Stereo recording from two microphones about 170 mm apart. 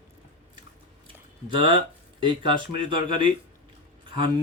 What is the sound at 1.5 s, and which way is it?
Speech, 30° right (ahead or behind).